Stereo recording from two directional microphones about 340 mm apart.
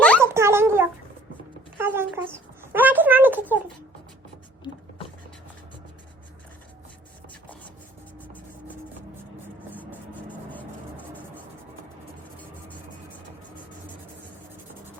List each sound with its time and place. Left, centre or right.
0.2 s a sound: centre
8.2 s vehicle: centre
9.7 s music: centre